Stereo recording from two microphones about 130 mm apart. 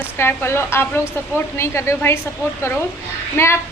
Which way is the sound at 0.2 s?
20° left (ahead or behind).